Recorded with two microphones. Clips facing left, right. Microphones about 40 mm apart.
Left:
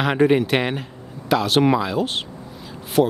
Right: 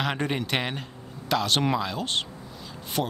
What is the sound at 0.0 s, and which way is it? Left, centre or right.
Speech, centre.